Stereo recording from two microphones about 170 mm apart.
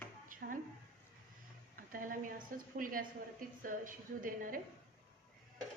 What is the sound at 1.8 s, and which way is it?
A woman's voice, 55° right (ahead or behind).